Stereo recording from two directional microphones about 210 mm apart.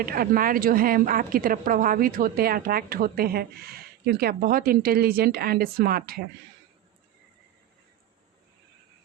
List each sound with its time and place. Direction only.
0.0 s a woman's voice: 45° right (ahead or behind)